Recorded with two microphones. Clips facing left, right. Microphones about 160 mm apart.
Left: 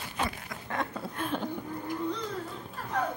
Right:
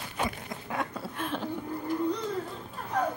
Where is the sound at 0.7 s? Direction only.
5° right (ahead or behind).